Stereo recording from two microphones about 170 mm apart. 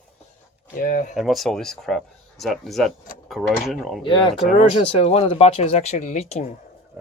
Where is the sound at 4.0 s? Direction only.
30° left (ahead or behind).